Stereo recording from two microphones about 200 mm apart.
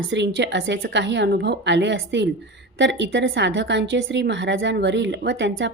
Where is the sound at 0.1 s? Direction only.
60° right (ahead or behind).